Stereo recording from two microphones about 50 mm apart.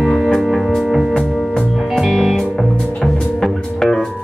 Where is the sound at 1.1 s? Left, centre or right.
Centre.